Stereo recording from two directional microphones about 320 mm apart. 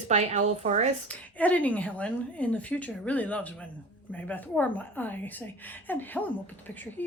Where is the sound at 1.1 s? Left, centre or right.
Centre.